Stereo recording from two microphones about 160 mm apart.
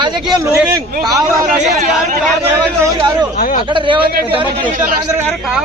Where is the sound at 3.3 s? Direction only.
60° left (ahead or behind).